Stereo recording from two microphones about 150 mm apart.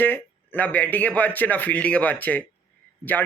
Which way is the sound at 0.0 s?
10° left (ahead or behind).